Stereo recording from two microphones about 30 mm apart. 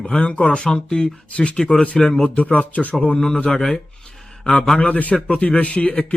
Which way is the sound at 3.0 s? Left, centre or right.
Left.